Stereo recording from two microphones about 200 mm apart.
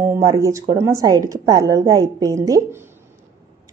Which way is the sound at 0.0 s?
15° right (ahead or behind).